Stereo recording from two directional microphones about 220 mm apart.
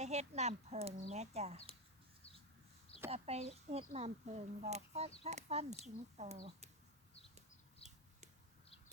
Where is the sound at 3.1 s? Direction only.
30° right (ahead or behind).